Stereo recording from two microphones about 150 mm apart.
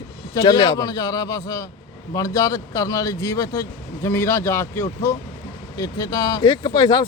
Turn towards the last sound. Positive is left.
turn(degrees=25)  # may be behind; listen again after turning